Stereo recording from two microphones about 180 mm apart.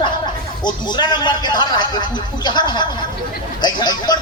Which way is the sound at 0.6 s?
25° left (ahead or behind).